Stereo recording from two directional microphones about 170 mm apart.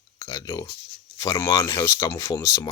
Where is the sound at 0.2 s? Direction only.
20° left (ahead or behind).